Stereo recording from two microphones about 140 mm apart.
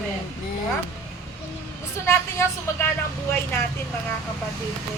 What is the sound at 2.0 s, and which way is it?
Speech, 20° left (ahead or behind).